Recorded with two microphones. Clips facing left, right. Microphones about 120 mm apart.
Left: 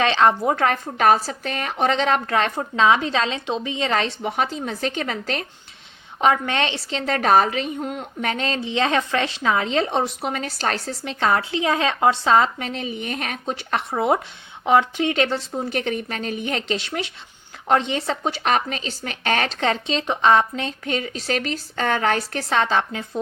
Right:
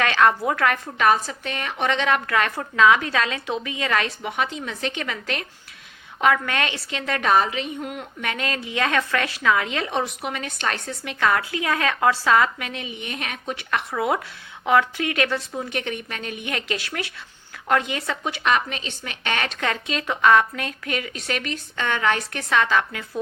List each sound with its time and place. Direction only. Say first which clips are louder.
0.0 s a woman's voice: left 2 dB; 25° left (ahead or behind)